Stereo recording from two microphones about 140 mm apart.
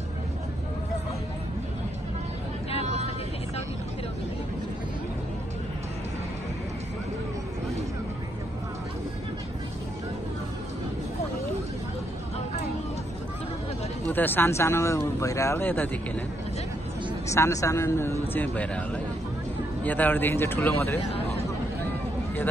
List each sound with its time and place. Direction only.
14.0 s speech: 15° left (ahead or behind)
17.3 s a man's voice: 20° left (ahead or behind)